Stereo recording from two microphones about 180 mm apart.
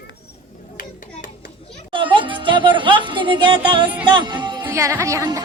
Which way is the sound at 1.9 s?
25° right (ahead or behind).